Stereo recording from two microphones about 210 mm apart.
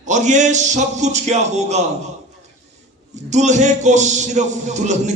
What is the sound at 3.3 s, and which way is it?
A man's voice, 35° right (ahead or behind).